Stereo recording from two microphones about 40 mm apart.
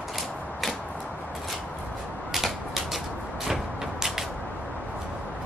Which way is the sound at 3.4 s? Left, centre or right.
Centre.